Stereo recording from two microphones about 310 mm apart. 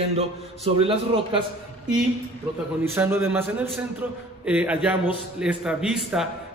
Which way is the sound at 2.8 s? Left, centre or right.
Centre.